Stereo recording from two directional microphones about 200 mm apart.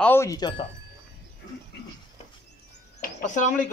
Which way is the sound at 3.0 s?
40° left (ahead or behind).